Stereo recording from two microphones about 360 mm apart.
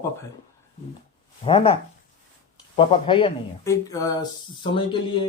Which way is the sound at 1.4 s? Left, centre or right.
Centre.